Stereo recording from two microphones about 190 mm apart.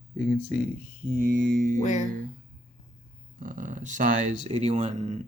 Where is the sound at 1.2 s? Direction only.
50° right (ahead or behind).